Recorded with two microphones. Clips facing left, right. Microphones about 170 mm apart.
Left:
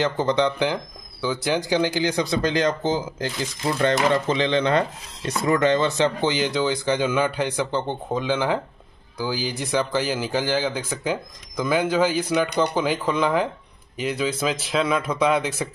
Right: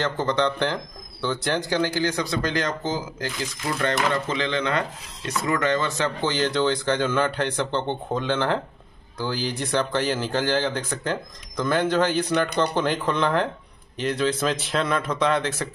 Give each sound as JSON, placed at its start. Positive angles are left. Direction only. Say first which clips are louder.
{"t": 0.0, "sound": "speech", "louder": "left 2 dB", "side_deg": 15}